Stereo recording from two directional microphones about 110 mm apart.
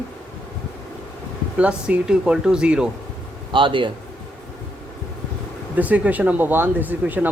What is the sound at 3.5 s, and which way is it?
Speech, 50° right (ahead or behind).